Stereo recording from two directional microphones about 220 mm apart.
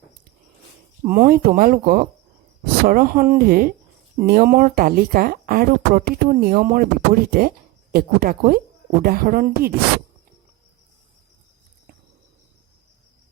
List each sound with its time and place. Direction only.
1.0 s speech: 40° right (ahead or behind)